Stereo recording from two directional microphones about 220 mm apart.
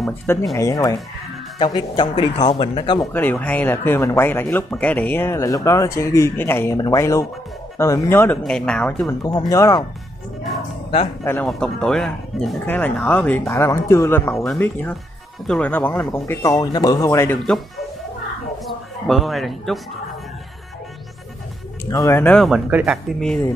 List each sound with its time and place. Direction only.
0.6 s speech: 15° left (ahead or behind)
3.1 s speech: 5° left (ahead or behind)
9.0 s speech: 15° left (ahead or behind)
11.2 s a man's voice: 5° left (ahead or behind)
21.9 s speech: 15° left (ahead or behind); by 22.9 s 5° right (ahead or behind)